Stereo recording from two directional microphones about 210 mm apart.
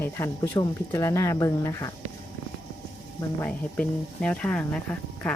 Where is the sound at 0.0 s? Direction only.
10° left (ahead or behind).